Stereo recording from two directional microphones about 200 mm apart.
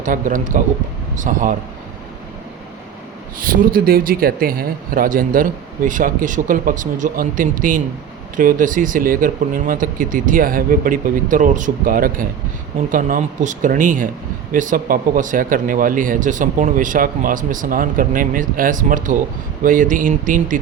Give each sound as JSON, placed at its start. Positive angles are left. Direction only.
{"t": 0.0, "sound": "speech", "side_deg": -40}
{"t": 3.3, "sound": "speech", "side_deg": -45}